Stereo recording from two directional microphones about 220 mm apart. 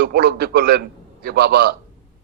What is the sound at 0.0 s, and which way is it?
A man's voice, 45° right (ahead or behind).